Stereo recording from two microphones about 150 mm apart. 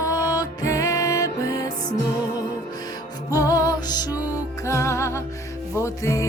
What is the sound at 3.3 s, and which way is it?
Music, 25° left (ahead or behind).